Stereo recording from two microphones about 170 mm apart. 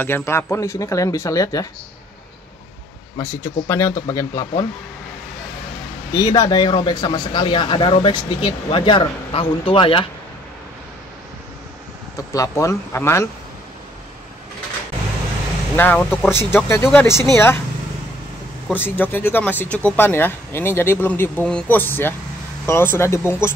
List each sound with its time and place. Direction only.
0.0 s speech: 15° left (ahead or behind)
3.2 s speech: 15° left (ahead or behind)
6.1 s speech: 20° left (ahead or behind)
12.3 s speech: 20° left (ahead or behind)
15.7 s speech: 10° left (ahead or behind)
18.7 s speech: 10° left (ahead or behind)